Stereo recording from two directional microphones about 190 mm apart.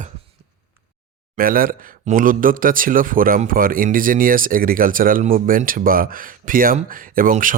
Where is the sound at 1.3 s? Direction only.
50° right (ahead or behind).